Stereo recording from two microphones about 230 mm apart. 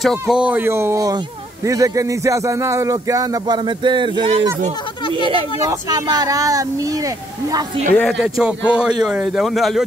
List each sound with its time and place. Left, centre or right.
0.0 s speech: centre
7.9 s speech: centre